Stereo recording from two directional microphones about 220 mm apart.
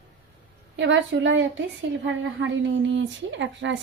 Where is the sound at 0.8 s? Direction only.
55° right (ahead or behind).